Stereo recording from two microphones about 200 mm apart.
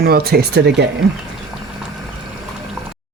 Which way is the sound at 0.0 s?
50° right (ahead or behind).